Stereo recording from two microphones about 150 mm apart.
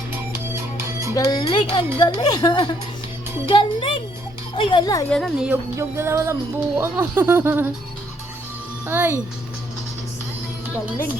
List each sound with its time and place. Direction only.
0.1 s music: 15° right (ahead or behind)
1.1 s speech: 25° left (ahead or behind)
5.1 s a woman's voice: 5° left (ahead or behind)
5.5 s speech: 15° right (ahead or behind)
8.9 s speech: 15° right (ahead or behind)